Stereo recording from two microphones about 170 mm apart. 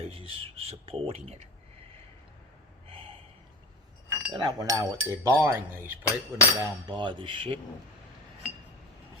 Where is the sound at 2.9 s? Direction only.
30° right (ahead or behind).